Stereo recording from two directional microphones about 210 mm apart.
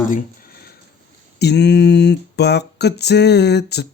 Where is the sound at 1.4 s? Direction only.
55° left (ahead or behind).